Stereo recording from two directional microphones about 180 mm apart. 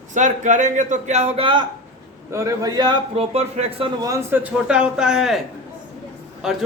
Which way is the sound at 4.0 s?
15° right (ahead or behind).